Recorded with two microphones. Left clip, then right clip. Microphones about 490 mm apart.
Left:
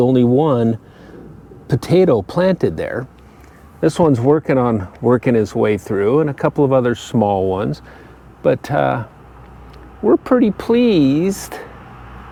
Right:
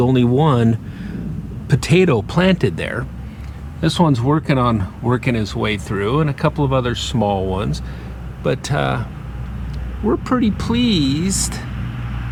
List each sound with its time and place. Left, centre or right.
0.0 s speech: left
3.8 s speech: left
10.1 s speech: left